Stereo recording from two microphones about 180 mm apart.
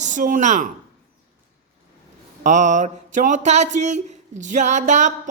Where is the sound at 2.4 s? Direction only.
45° right (ahead or behind).